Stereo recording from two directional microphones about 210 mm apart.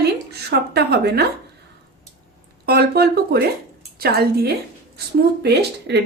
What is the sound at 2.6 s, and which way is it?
Speech, 50° right (ahead or behind).